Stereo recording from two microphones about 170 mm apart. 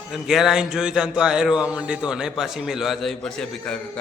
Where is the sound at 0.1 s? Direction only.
Centre (ahead or behind).